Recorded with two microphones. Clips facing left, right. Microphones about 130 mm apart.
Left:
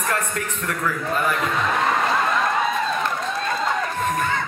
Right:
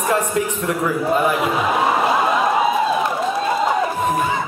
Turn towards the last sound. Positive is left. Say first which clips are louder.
# right 4 dB
turn(degrees=-10)  # may be behind; listen again after turning